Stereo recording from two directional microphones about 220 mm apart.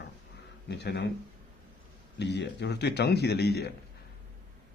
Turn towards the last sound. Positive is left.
turn(degrees=45)  # may be behind; listen again after turning